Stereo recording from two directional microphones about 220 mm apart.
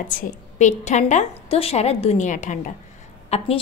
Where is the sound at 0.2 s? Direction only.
35° left (ahead or behind).